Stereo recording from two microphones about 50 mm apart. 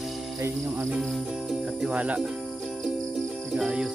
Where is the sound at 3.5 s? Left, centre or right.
Centre.